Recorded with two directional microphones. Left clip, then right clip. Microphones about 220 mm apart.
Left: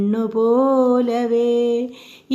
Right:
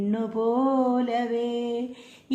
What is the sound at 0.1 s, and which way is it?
Music, 25° left (ahead or behind).